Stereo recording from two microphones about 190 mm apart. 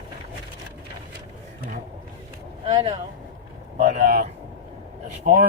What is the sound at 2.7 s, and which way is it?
Speech, 20° right (ahead or behind).